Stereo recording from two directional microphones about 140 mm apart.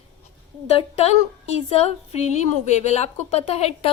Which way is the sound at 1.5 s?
50° left (ahead or behind).